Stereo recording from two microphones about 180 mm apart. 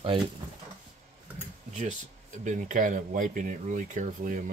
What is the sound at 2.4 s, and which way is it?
Speech, 45° right (ahead or behind).